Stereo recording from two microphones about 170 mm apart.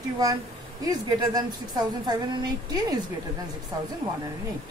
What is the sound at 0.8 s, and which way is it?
A woman's voice, 25° right (ahead or behind).